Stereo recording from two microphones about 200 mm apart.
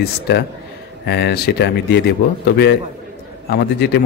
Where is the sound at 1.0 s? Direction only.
60° left (ahead or behind).